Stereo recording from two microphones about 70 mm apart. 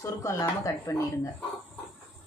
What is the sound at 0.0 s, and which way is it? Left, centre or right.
Speech, left.